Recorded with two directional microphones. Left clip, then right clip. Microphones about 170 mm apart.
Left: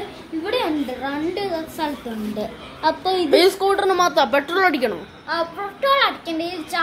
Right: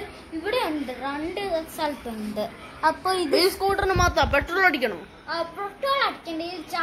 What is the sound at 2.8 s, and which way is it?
Speech, 50° right (ahead or behind).